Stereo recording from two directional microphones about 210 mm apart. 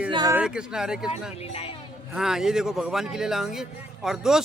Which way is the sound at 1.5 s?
25° left (ahead or behind).